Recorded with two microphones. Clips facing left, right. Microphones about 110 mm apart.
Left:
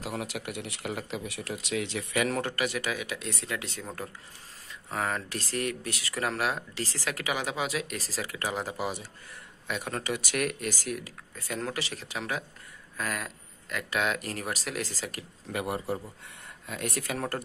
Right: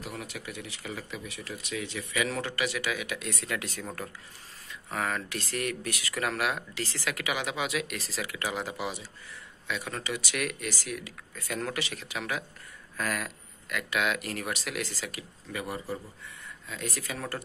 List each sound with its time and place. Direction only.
0.0 s speech: 80° left
2.1 s speech: 50° left (ahead or behind); by 3.8 s 25° left (ahead or behind)
4.9 s speech: 25° left (ahead or behind); by 11.1 s 45° left (ahead or behind)
11.3 s speech: 25° left (ahead or behind)
12.9 s speech: 20° left (ahead or behind); by 15.2 s 40° left (ahead or behind)
16.6 s speech: 55° left (ahead or behind)